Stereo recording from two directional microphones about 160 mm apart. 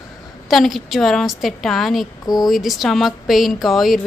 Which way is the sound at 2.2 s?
25° left (ahead or behind).